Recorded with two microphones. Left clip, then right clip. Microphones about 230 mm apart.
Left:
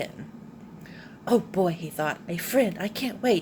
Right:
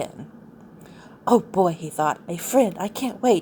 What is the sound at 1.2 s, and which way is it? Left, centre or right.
A woman's voice, right.